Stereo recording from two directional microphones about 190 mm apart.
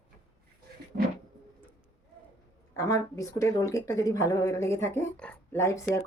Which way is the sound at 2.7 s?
15° left (ahead or behind).